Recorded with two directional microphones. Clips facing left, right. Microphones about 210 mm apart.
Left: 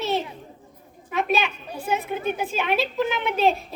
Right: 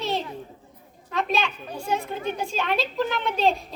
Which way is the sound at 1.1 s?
10° left (ahead or behind).